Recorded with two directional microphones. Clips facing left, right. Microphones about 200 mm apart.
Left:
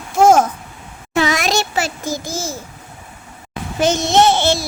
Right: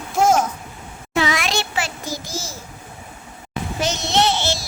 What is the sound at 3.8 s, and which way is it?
Speech, 50° left (ahead or behind).